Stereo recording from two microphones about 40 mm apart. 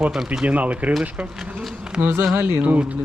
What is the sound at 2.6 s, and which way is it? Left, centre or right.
Speech, right.